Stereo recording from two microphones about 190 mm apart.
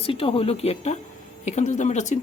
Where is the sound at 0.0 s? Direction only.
30° left (ahead or behind).